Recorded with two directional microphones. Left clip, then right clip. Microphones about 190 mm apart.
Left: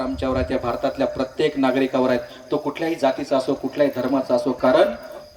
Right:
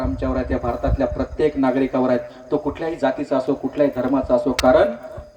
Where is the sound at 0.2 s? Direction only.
35° right (ahead or behind).